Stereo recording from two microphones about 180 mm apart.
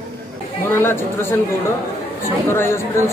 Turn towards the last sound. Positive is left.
turn(degrees=15)  # may be behind; listen again after turning